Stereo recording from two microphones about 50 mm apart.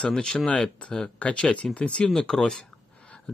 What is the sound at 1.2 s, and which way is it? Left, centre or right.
Speech, left.